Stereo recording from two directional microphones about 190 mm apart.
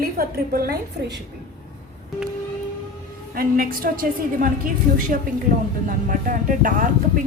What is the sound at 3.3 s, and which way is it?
Speech, 50° right (ahead or behind).